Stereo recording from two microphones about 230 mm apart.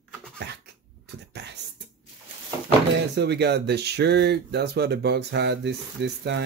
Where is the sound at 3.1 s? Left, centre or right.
Right.